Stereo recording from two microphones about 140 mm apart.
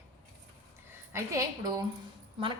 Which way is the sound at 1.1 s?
25° right (ahead or behind).